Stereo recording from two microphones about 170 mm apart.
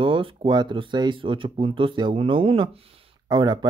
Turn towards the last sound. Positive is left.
turn(degrees=-25)  # may be behind; listen again after turning